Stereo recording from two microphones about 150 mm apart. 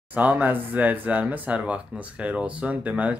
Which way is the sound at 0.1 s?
10° right (ahead or behind).